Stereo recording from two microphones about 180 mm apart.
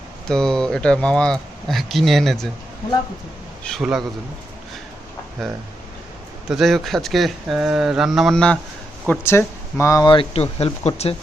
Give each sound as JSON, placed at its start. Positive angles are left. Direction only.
{"t": 0.3, "sound": "speech", "side_deg": 5}
{"t": 3.6, "sound": "speech", "side_deg": 0}
{"t": 6.5, "sound": "speech", "side_deg": 0}